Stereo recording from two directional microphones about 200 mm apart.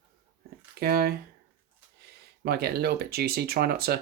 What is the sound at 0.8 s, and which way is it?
Speech, 50° right (ahead or behind).